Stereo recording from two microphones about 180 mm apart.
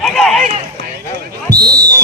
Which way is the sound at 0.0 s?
Centre (ahead or behind).